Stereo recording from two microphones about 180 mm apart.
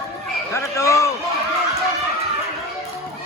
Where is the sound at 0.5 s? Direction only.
15° left (ahead or behind).